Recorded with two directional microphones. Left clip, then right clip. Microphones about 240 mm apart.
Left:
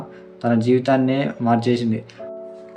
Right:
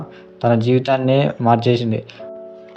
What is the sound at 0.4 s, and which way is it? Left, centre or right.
Speech, right.